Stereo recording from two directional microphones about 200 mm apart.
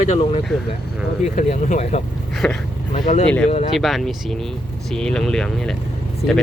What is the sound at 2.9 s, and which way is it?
Speech, 35° left (ahead or behind).